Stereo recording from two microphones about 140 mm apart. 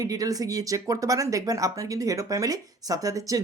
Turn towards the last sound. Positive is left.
turn(degrees=-25)  # may be behind; listen again after turning